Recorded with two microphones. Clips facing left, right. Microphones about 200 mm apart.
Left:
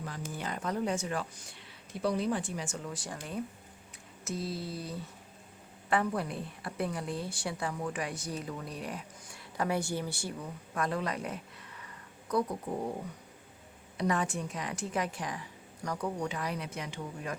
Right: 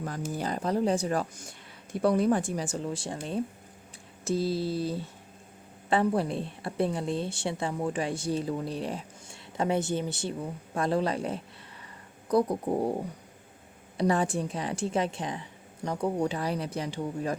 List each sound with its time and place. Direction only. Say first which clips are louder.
0.0 s a woman's voice: right 6 dB; 40° right (ahead or behind)